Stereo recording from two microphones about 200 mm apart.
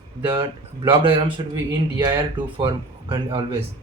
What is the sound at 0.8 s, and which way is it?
Speech, 25° right (ahead or behind).